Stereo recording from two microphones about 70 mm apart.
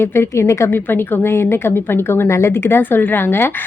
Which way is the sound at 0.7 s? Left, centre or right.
Left.